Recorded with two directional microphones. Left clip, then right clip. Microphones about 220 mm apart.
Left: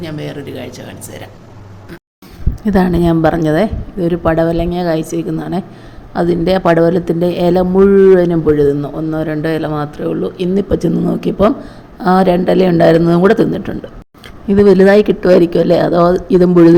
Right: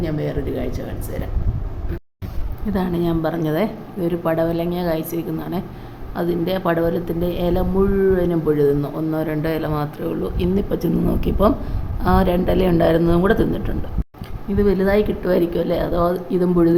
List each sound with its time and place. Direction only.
0.0 s speech: 10° right (ahead or behind)
2.6 s speech: 30° left (ahead or behind)